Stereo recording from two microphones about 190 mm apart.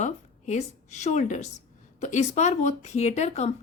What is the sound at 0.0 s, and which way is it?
A woman's voice, 40° left (ahead or behind).